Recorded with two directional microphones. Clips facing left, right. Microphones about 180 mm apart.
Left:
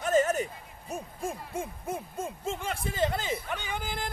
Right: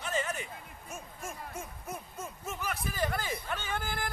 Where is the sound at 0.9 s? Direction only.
35° left (ahead or behind); by 4.1 s 20° left (ahead or behind).